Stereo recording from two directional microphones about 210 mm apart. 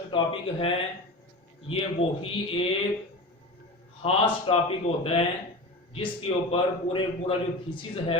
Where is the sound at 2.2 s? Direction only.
25° left (ahead or behind).